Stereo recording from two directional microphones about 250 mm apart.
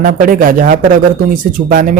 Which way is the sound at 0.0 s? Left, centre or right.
Right.